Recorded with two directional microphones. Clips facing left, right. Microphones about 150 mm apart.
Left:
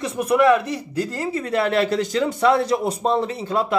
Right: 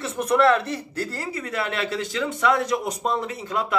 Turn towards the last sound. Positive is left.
turn(degrees=30)  # may be behind; listen again after turning